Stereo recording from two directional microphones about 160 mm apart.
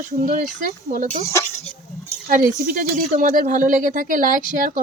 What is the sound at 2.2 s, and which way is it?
Speech, 60° right (ahead or behind).